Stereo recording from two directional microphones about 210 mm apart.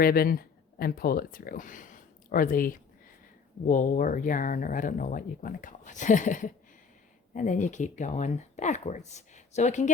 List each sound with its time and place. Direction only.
0.0 s speech: 45° left (ahead or behind)